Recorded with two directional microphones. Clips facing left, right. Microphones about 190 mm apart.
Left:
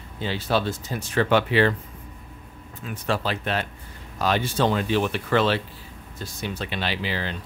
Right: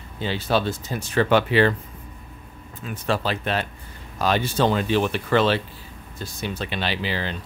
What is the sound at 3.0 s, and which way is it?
Speech, 30° right (ahead or behind).